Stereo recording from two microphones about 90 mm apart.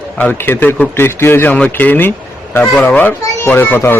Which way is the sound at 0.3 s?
25° left (ahead or behind).